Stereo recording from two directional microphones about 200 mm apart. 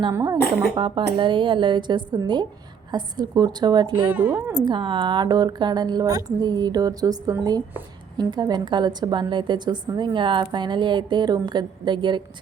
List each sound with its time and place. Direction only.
0.0 s a woman's voice: 15° right (ahead or behind)
4.1 s a woman's voice: 10° right (ahead or behind)
4.6 s a woman's voice: 25° right (ahead or behind)